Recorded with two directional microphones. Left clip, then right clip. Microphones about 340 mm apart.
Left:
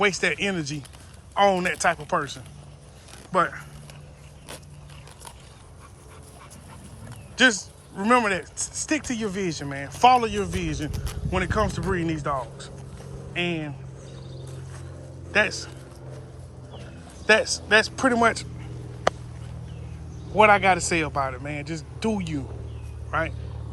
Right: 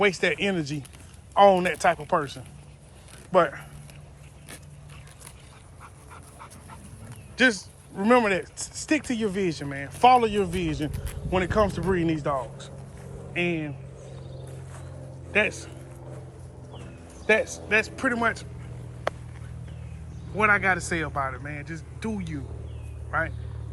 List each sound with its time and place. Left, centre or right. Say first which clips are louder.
0.0 s speech: even; centre
7.3 s speech: left 2 dB; centre
10.9 s speech: left 3 dB; left
11.3 s speech: right 2 dB; centre
15.3 s speech: left 2 dB; centre
17.2 s a man's voice: left 3 dB; centre
19.1 s a sound: left 6 dB; left
20.3 s a man's voice: left 5 dB; centre